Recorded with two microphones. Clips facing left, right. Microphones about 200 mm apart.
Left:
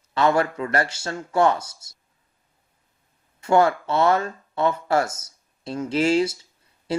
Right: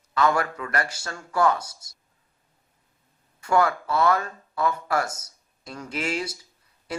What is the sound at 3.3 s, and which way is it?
Speech, 25° left (ahead or behind).